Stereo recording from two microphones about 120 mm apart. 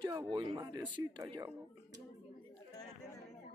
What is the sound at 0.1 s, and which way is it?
Speech, 30° right (ahead or behind).